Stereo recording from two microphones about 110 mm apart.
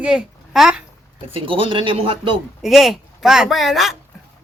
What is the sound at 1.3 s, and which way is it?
A man's voice, 50° right (ahead or behind).